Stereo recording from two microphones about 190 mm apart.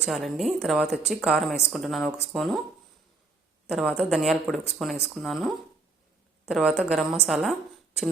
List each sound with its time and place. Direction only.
0.0 s a woman's voice: centre (ahead or behind)
3.7 s a woman's voice: 5° right (ahead or behind)